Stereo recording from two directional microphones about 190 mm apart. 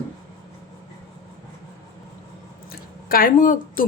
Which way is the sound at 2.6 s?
50° left (ahead or behind).